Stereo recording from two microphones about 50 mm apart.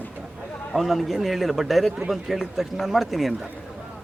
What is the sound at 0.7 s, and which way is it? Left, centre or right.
Speech, centre.